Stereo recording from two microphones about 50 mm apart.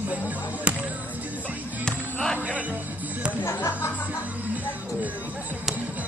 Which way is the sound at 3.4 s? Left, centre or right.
Left.